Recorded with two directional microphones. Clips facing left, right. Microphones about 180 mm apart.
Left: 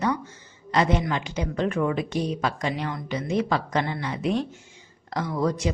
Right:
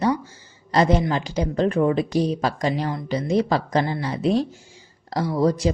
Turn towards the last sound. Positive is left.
turn(degrees=-35)  # may be behind; listen again after turning